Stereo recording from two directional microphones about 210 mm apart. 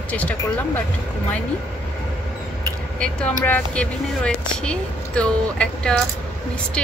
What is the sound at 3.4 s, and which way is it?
Speech, 5° left (ahead or behind).